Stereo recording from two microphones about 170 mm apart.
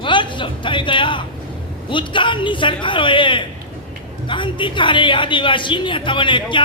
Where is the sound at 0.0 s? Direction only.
30° left (ahead or behind).